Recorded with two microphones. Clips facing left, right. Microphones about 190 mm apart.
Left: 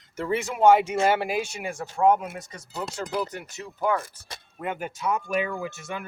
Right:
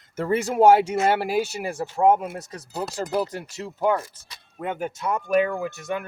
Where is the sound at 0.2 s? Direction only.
40° right (ahead or behind).